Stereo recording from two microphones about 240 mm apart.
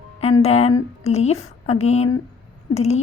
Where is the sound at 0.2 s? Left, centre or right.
Left.